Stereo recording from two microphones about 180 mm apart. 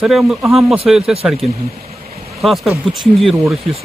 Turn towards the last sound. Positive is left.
turn(degrees=0)  # may be behind; listen again after turning